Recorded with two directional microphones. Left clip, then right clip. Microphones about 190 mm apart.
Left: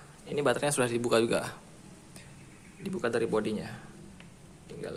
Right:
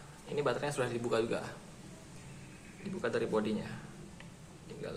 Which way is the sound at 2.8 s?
50° left (ahead or behind).